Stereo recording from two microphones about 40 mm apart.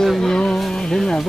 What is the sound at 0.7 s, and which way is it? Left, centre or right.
Music, centre.